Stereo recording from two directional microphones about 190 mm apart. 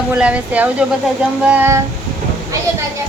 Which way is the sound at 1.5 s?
10° right (ahead or behind).